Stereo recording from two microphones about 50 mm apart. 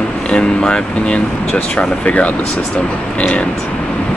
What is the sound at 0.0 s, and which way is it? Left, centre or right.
Speech, centre.